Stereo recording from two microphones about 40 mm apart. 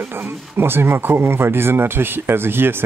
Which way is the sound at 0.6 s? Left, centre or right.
Right.